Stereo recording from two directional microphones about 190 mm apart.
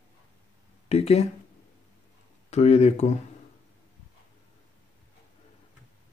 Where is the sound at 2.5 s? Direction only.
35° left (ahead or behind).